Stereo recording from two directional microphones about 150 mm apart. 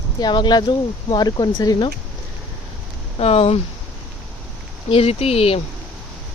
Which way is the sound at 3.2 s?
40° left (ahead or behind).